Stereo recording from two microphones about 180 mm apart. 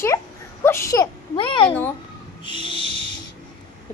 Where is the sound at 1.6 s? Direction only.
10° left (ahead or behind).